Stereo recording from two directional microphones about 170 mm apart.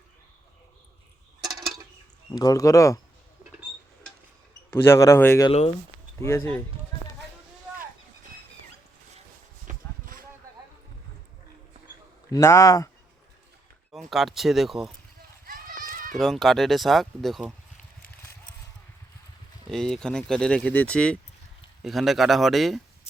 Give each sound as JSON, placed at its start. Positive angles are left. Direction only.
{"t": 2.3, "sound": "speech", "side_deg": 20}
{"t": 4.7, "sound": "a man's voice", "side_deg": 15}
{"t": 5.5, "sound": "speech", "side_deg": 35}
{"t": 6.1, "sound": "speech", "side_deg": 15}
{"t": 9.6, "sound": "a sound", "side_deg": -55}
{"t": 12.3, "sound": "a man's voice", "side_deg": 15}
{"t": 13.9, "sound": "speech", "side_deg": 0}
{"t": 15.4, "sound": "children playing", "side_deg": -55}
{"t": 16.1, "sound": "speech", "side_deg": 0}
{"t": 19.7, "sound": "speech", "side_deg": 5}